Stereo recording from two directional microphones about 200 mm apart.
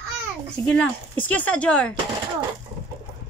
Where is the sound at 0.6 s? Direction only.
5° left (ahead or behind).